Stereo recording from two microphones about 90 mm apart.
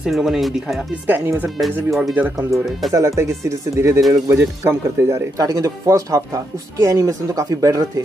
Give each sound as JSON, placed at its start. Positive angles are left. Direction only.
{"t": 0.0, "sound": "speech", "side_deg": -5}
{"t": 1.0, "sound": "speech", "side_deg": -25}
{"t": 1.6, "sound": "speech", "side_deg": 0}
{"t": 2.9, "sound": "speech", "side_deg": -35}